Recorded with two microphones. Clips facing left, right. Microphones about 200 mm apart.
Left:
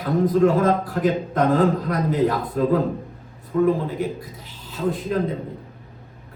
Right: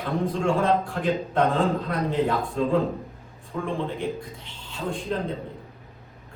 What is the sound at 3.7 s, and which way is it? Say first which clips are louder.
A man's voice: left 6 dB; 5° left (ahead or behind).